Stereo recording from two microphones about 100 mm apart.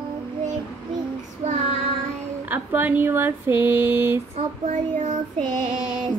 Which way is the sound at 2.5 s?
20° right (ahead or behind).